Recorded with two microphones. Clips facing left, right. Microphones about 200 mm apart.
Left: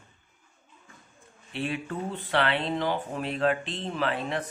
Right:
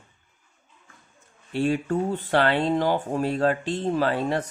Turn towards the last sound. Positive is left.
turn(degrees=-40)  # may be behind; listen again after turning